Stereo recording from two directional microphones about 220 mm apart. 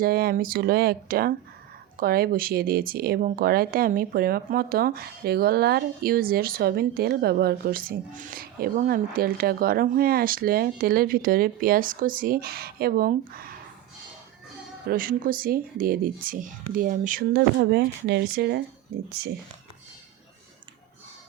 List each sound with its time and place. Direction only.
0.0 s speech: 45° right (ahead or behind)
14.8 s speech: 40° right (ahead or behind)